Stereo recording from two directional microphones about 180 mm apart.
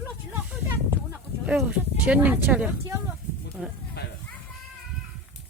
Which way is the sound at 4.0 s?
60° left (ahead or behind).